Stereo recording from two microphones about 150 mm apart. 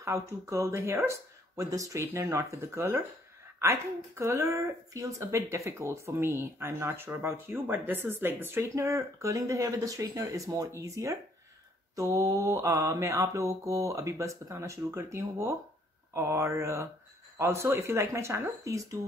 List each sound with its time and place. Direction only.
0.0 s mantra: 20° right (ahead or behind)
3.5 s a woman's voice: 15° right (ahead or behind)
11.9 s mantra: 20° right (ahead or behind)
17.4 s a woman's voice: 20° right (ahead or behind)